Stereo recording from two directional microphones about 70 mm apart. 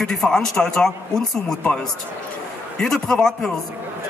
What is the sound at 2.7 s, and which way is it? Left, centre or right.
Speech, centre.